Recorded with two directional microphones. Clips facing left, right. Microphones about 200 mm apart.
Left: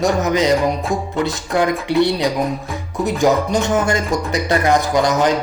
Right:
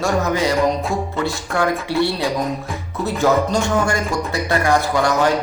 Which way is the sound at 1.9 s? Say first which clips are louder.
Left 3 dB; 20° left (ahead or behind).